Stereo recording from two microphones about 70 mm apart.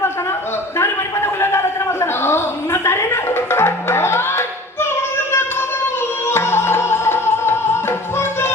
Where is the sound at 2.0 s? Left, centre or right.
Left.